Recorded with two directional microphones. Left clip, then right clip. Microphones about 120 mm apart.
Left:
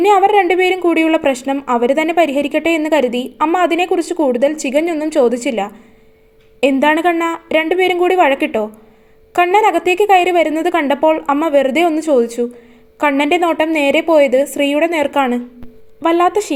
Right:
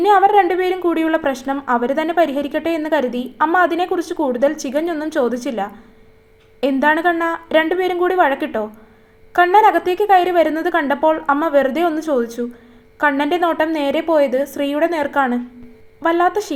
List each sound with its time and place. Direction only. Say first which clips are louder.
0.0 s speech: left 1 dB; 50° left (ahead or behind)
5.2 s speech: left 7 dB; 55° left (ahead or behind)